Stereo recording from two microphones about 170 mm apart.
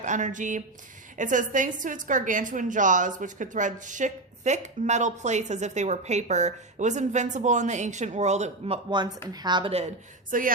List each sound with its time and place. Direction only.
0.0 s a woman's voice: 45° right (ahead or behind)
10.3 s a woman's voice: 50° right (ahead or behind)